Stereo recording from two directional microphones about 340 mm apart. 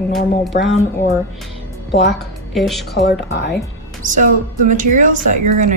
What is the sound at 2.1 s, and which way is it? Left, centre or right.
Speech, centre.